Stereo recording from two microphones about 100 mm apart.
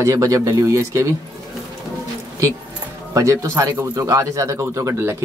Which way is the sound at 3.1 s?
30° right (ahead or behind).